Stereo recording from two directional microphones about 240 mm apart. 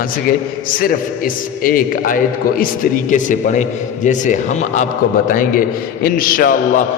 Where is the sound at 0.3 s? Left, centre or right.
Left.